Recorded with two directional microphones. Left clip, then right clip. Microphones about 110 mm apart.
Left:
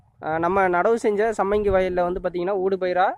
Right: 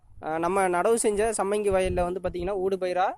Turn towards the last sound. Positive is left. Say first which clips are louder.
# left 5 dB
turn(degrees=-10)  # may be behind; listen again after turning